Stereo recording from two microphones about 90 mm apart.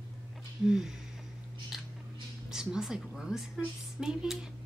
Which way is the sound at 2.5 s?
5° right (ahead or behind).